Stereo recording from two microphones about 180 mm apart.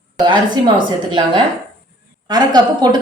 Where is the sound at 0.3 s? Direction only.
25° right (ahead or behind).